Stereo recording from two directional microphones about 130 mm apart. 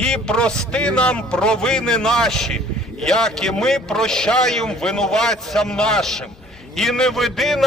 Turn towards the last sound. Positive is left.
turn(degrees=0)  # may be behind; listen again after turning